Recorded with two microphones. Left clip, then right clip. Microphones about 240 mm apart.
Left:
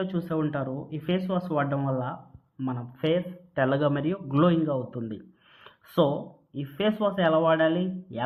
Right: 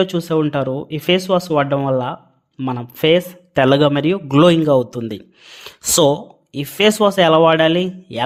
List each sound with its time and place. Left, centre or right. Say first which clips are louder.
0.0 s a man's voice: right 12 dB; right